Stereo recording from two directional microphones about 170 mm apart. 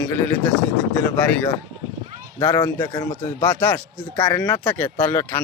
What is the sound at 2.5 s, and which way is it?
Speech, 25° left (ahead or behind).